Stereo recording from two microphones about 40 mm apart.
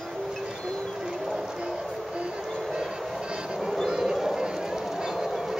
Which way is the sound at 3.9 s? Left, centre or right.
Centre.